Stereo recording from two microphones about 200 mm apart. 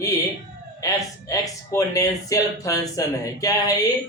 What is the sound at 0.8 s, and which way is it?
A man's voice, 15° left (ahead or behind).